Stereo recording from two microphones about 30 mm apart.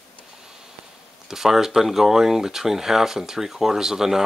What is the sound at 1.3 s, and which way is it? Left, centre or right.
Speech, centre.